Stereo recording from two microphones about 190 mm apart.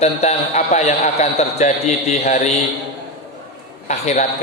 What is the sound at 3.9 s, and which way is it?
Speech, 40° left (ahead or behind).